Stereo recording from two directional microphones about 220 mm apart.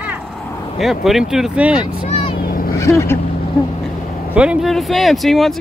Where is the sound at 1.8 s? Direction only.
25° left (ahead or behind).